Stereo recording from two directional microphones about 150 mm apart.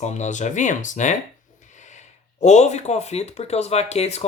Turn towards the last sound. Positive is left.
turn(degrees=45)  # may be behind; listen again after turning